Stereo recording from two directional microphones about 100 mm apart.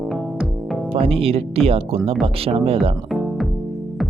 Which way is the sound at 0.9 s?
75° right (ahead or behind).